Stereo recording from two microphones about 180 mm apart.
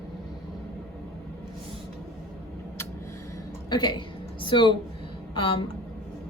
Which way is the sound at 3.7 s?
25° left (ahead or behind).